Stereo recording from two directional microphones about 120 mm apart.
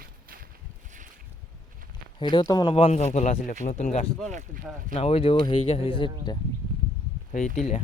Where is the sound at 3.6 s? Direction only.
80° left.